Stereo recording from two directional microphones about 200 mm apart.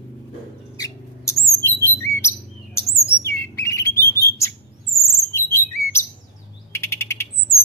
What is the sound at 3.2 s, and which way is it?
Bird, 15° left (ahead or behind).